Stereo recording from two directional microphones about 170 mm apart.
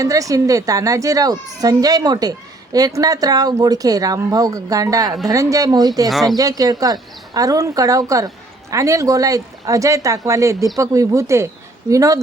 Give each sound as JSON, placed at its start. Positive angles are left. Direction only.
{"t": 0.0, "sound": "speech", "side_deg": -20}
{"t": 6.1, "sound": "speech", "side_deg": 0}
{"t": 6.3, "sound": "speech", "side_deg": -20}